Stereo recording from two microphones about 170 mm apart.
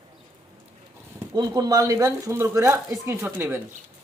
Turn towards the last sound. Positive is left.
turn(degrees=-15)  # may be behind; listen again after turning